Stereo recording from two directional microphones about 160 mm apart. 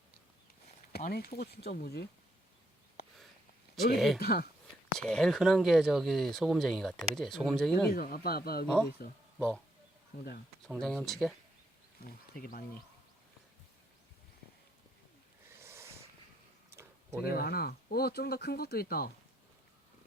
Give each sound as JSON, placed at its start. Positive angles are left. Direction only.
{"t": 0.9, "sound": "speech", "side_deg": 75}
{"t": 3.9, "sound": "speech", "side_deg": 0}
{"t": 4.2, "sound": "speech", "side_deg": 80}
{"t": 4.9, "sound": "speech", "side_deg": 5}
{"t": 7.9, "sound": "speech", "side_deg": 65}
{"t": 8.6, "sound": "speech", "side_deg": 5}
{"t": 10.7, "sound": "speech", "side_deg": 5}
{"t": 12.0, "sound": "speech", "side_deg": 65}
{"t": 15.5, "sound": "a sound", "side_deg": -15}
{"t": 17.2, "sound": "speech", "side_deg": 75}